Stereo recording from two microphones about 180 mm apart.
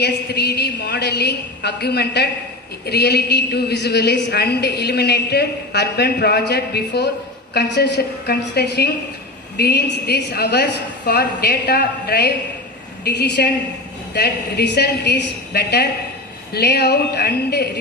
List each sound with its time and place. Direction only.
0.0 s a woman's voice: 65° left (ahead or behind)